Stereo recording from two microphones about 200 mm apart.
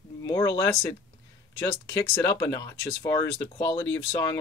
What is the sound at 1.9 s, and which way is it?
Speech, 15° left (ahead or behind).